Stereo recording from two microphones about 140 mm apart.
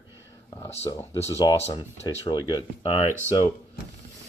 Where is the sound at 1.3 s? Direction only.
25° left (ahead or behind).